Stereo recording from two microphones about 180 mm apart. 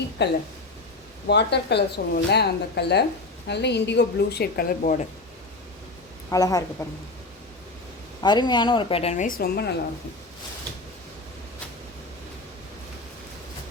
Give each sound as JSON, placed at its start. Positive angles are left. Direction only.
{"t": 0.2, "sound": "a woman's voice", "side_deg": 75}
{"t": 6.3, "sound": "a woman's voice", "side_deg": 20}
{"t": 8.2, "sound": "a woman's voice", "side_deg": 25}
{"t": 9.4, "sound": "a woman's voice", "side_deg": 65}